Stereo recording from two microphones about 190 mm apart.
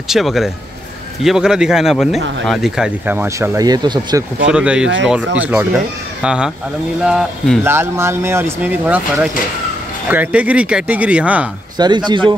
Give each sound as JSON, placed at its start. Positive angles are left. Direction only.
{"t": 0.1, "sound": "speech", "side_deg": 0}
{"t": 4.5, "sound": "speech", "side_deg": -5}
{"t": 7.6, "sound": "speech", "side_deg": -15}
{"t": 11.8, "sound": "speech", "side_deg": -25}